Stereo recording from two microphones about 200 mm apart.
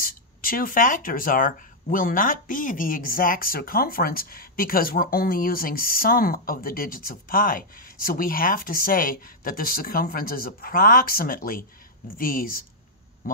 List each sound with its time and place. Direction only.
0.0 s speech: 45° left (ahead or behind)